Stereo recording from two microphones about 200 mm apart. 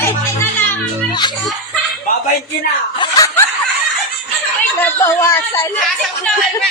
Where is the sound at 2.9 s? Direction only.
15° left (ahead or behind).